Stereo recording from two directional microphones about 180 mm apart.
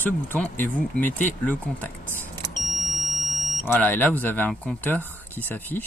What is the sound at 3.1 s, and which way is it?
Smoke detector, 40° left (ahead or behind).